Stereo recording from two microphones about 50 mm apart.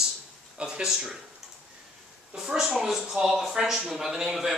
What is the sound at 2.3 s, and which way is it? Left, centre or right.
Speech, centre.